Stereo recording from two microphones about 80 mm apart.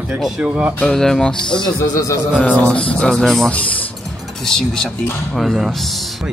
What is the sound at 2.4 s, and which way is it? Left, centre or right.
Speech, centre.